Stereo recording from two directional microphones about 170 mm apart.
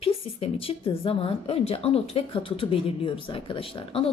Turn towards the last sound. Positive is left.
turn(degrees=30)  # may be behind; listen again after turning